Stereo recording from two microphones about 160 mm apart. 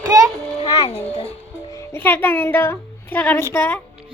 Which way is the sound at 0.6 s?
30° left (ahead or behind).